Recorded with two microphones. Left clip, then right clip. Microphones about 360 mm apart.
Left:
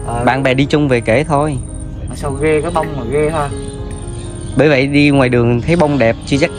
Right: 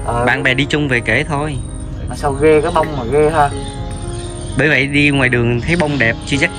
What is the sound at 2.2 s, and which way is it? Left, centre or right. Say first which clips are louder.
Speech: right 3 dB; centre.